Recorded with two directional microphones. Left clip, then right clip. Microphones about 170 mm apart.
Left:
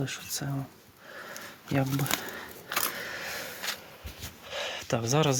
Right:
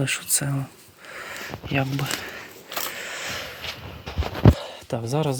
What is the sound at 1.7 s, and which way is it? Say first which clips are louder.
Speech: right 3 dB; centre (ahead or behind).